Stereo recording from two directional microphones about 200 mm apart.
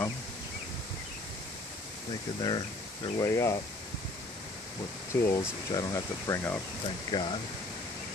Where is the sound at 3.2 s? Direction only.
15° left (ahead or behind).